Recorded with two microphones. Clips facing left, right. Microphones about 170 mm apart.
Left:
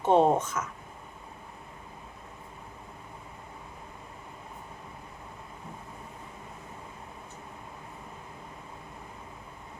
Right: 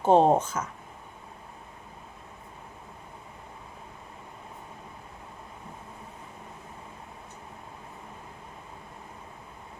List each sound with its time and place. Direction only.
0.0 s speech: 30° right (ahead or behind)